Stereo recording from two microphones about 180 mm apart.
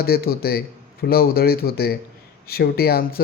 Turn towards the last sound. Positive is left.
turn(degrees=60)  # may be behind; listen again after turning